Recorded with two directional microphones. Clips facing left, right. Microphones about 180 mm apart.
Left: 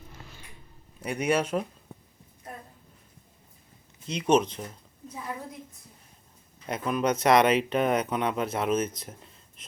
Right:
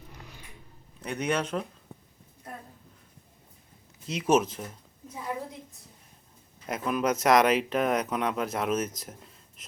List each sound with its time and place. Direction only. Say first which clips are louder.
0.1 s a sound: even; 15° right (ahead or behind)
1.0 s speech: left 3 dB; 10° left (ahead or behind)
4.0 s speech: left 1 dB; centre (ahead or behind)
6.7 s speech: left 1 dB; centre (ahead or behind)